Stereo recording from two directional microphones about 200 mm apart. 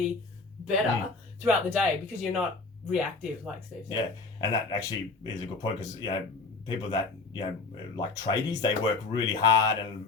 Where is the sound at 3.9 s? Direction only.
20° left (ahead or behind).